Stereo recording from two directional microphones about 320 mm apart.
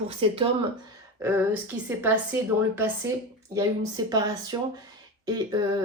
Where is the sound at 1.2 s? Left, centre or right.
Centre.